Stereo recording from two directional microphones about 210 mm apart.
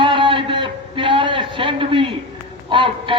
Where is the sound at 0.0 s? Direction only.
25° right (ahead or behind).